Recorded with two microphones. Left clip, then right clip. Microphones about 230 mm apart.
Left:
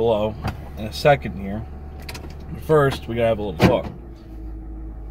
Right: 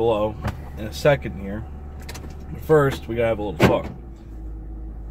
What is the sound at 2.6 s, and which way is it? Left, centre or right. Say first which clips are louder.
Speech: even; left.